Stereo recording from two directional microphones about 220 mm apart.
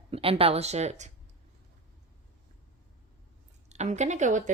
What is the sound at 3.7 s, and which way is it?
Speech, 30° right (ahead or behind).